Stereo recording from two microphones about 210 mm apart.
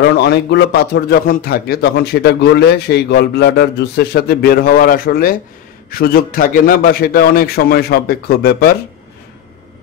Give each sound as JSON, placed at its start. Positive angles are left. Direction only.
{"t": 0.0, "sound": "a man's voice", "side_deg": 50}